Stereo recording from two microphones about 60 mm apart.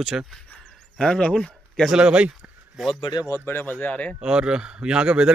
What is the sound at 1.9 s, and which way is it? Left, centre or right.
Speech, centre.